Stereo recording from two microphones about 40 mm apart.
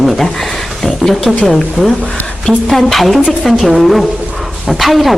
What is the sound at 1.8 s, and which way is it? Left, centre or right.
Speech, right.